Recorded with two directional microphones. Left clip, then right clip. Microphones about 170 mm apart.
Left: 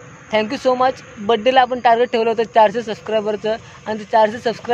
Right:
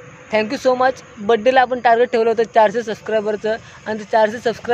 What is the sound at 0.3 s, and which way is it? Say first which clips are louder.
A man's voice: even; 10° right (ahead or behind).